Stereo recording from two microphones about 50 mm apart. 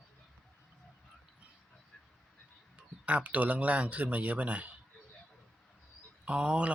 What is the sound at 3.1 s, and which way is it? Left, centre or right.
Speech, right.